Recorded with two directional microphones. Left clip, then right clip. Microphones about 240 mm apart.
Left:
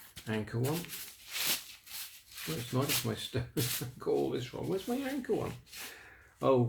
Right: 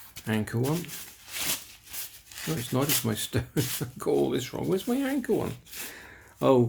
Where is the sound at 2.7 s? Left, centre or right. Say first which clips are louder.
Right 5 dB; right.